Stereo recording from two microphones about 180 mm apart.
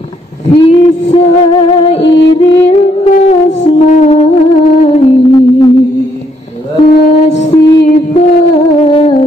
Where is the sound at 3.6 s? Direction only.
45° left (ahead or behind).